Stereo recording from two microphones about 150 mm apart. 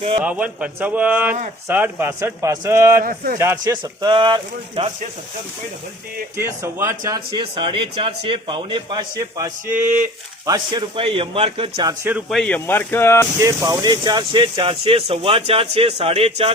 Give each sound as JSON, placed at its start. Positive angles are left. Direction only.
{"t": 0.2, "sound": "speech", "side_deg": -10}
{"t": 3.0, "sound": "speech", "side_deg": -70}
{"t": 3.3, "sound": "speech", "side_deg": -20}
{"t": 6.3, "sound": "speech", "side_deg": -15}
{"t": 7.3, "sound": "speech", "side_deg": -35}
{"t": 9.6, "sound": "speech", "side_deg": -10}
{"t": 10.4, "sound": "speech", "side_deg": -25}
{"t": 12.3, "sound": "speech", "side_deg": 5}
{"t": 12.5, "sound": "speech", "side_deg": 15}
{"t": 13.4, "sound": "speech", "side_deg": -20}